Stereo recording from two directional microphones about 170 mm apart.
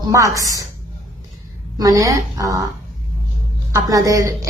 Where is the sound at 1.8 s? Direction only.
20° right (ahead or behind).